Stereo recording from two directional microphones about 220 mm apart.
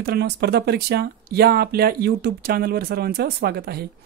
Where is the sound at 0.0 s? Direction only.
45° right (ahead or behind).